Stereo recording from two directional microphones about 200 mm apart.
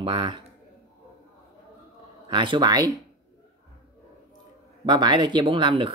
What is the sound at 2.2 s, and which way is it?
Speech, 25° right (ahead or behind).